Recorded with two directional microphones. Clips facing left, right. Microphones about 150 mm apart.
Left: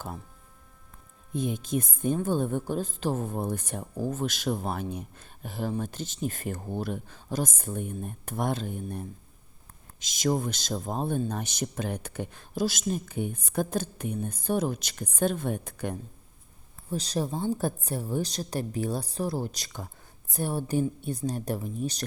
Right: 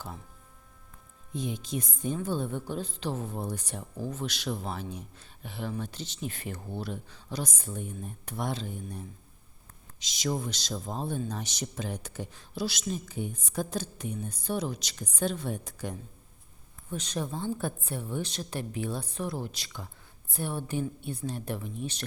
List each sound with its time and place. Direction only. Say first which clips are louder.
1.3 s speech: left 5 dB; 50° left (ahead or behind)
16.9 s a woman's voice: left 4 dB; 35° left (ahead or behind)